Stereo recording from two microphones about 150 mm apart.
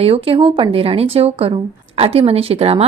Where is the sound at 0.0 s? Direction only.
40° right (ahead or behind).